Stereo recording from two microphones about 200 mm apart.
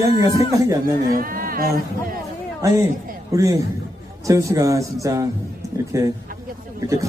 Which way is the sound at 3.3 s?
15° right (ahead or behind).